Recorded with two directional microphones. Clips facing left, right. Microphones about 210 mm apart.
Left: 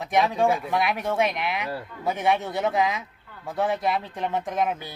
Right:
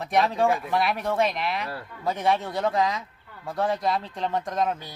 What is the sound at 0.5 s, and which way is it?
Speech, centre (ahead or behind).